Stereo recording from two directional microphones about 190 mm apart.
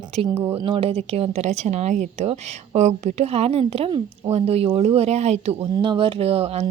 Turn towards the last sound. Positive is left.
turn(degrees=-30)  # may be behind; listen again after turning